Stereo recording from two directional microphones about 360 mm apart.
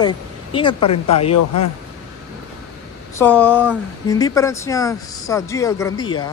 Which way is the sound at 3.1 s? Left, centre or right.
Centre.